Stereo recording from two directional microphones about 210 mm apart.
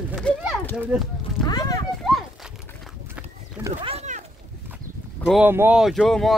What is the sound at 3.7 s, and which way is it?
Rowboat, 30° right (ahead or behind).